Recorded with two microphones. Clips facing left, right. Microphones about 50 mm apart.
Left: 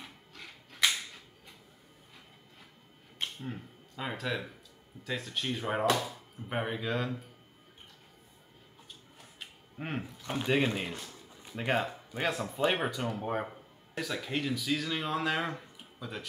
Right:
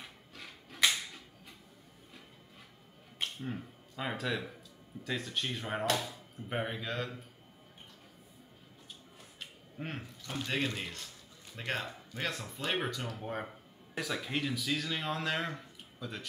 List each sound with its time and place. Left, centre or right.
0.0 s a sound: centre
3.2 s speech: centre
9.8 s speech: centre
13.9 s speech: centre